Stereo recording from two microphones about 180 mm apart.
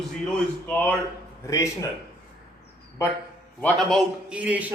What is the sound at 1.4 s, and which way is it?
Speech, 15° left (ahead or behind).